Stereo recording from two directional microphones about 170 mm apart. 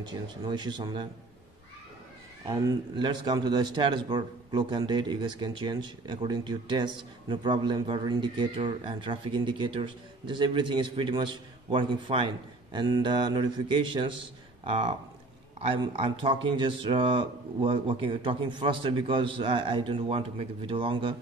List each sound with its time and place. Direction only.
0.0 s speech: 25° right (ahead or behind)
2.4 s speech: 25° right (ahead or behind)